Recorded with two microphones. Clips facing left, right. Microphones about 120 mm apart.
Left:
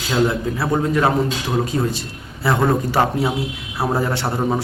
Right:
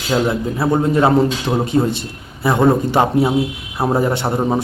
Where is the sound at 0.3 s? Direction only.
25° right (ahead or behind).